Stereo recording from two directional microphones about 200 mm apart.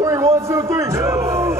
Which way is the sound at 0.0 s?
15° right (ahead or behind).